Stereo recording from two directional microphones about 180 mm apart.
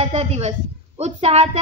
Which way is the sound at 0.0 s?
35° right (ahead or behind).